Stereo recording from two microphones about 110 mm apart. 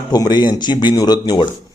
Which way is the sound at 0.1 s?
40° left (ahead or behind).